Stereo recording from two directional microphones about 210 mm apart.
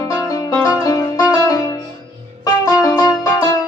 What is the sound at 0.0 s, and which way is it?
Music, 15° left (ahead or behind).